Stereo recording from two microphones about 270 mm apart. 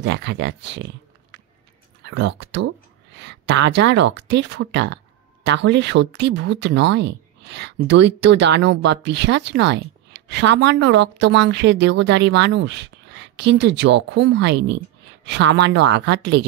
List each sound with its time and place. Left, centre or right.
0.0 s speech: right
2.0 s speech: right